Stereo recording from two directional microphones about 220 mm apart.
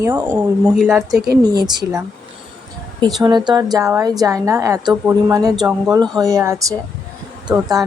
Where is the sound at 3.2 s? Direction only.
20° right (ahead or behind).